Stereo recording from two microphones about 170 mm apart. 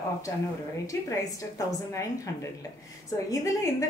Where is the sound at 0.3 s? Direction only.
15° left (ahead or behind).